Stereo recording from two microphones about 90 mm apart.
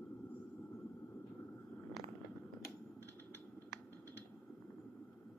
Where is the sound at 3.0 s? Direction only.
25° left (ahead or behind).